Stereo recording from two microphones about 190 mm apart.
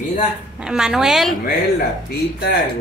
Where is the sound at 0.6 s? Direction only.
5° right (ahead or behind).